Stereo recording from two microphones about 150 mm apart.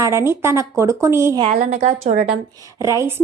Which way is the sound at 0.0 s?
20° right (ahead or behind).